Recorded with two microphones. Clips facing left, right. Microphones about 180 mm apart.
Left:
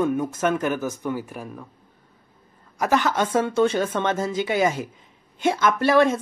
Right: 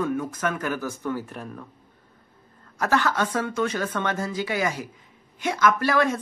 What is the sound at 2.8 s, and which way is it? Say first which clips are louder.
Speech: left 2 dB; 15° left (ahead or behind).